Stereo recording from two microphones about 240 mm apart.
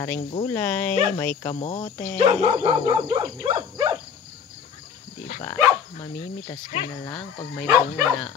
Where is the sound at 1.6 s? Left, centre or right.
Left.